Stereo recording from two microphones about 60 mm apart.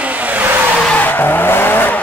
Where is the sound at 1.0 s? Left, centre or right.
Left.